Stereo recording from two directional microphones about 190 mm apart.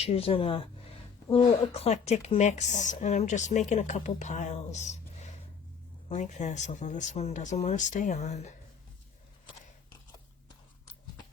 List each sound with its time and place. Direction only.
0.0 s speech: 30° left (ahead or behind)